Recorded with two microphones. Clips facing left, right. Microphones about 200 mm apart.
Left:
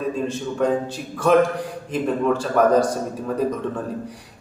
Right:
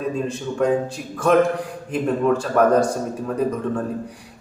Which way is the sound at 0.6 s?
5° right (ahead or behind).